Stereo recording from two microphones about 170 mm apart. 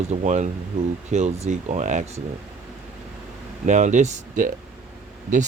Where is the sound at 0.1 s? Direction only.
45° right (ahead or behind).